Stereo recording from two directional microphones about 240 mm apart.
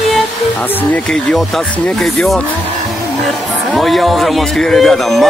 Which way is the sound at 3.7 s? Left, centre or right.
Centre.